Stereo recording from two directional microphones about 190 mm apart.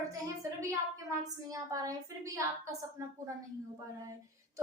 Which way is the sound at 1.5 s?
20° right (ahead or behind).